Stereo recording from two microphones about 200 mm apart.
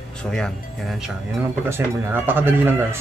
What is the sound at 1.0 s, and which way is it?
Speech, 10° right (ahead or behind).